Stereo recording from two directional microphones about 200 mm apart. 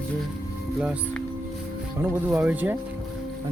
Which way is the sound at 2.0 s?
10° right (ahead or behind).